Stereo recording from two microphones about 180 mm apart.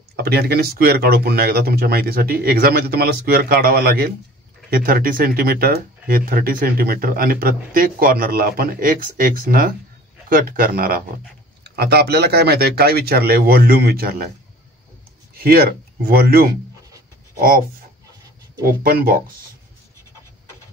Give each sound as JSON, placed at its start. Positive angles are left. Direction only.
{"t": 0.1, "sound": "speech", "side_deg": -60}
{"t": 11.6, "sound": "speech", "side_deg": -65}
{"t": 15.3, "sound": "a sound", "side_deg": -55}
{"t": 16.1, "sound": "speech", "side_deg": -55}
{"t": 18.8, "sound": "speech", "side_deg": -55}